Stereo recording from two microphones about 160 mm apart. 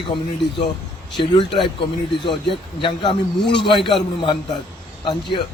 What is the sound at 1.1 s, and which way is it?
Speech, 30° left (ahead or behind).